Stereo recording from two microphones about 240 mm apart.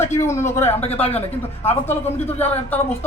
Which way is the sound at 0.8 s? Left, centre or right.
Left.